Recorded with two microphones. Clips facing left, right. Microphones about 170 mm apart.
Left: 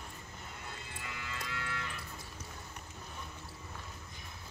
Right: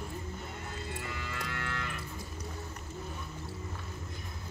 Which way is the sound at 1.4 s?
55° right (ahead or behind).